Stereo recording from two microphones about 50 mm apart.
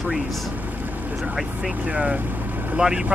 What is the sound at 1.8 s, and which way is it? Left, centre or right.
Speech, right.